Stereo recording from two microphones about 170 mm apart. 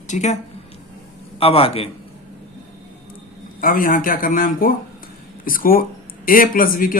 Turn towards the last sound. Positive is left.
turn(degrees=55)  # may be behind; listen again after turning